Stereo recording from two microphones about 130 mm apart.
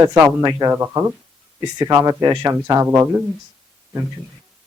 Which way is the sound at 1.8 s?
30° right (ahead or behind).